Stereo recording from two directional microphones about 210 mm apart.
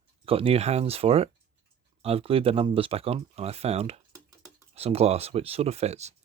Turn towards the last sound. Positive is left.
turn(degrees=-30)  # may be behind; listen again after turning